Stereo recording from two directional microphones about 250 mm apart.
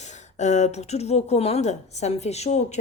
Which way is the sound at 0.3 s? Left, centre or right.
Left.